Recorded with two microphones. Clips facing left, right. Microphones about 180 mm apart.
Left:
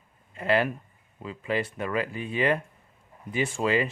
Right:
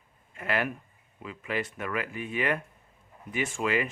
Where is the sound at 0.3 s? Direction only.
30° left (ahead or behind).